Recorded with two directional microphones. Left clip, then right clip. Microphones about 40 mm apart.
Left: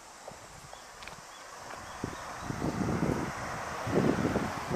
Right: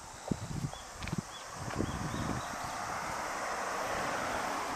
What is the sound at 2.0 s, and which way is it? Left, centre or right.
Vehicle, left.